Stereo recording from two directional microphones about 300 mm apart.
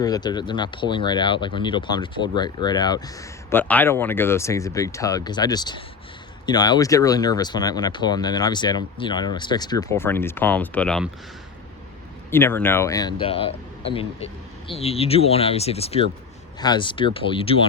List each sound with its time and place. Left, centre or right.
0.0 s speech: centre
12.3 s speech: centre